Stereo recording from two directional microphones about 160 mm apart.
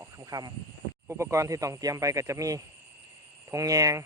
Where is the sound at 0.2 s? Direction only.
25° right (ahead or behind).